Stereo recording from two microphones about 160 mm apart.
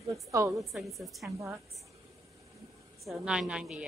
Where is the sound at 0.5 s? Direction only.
Centre (ahead or behind).